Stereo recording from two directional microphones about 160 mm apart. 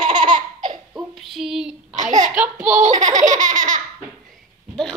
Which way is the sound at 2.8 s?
50° right (ahead or behind).